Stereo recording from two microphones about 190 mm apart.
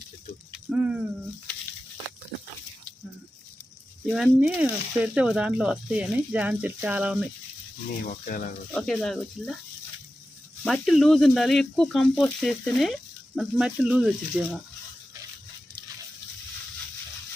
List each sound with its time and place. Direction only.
0.7 s speech: 5° right (ahead or behind)
4.1 s speech: 5° right (ahead or behind)
8.1 s speech: 45° left (ahead or behind)
8.7 s speech: 5° left (ahead or behind)
10.6 s speech: centre (ahead or behind)